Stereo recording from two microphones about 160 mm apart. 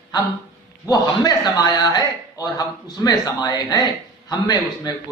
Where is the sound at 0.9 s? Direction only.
25° left (ahead or behind).